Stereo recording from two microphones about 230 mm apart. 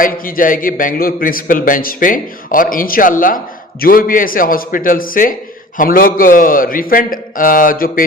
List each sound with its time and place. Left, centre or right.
0.0 s a man's voice: left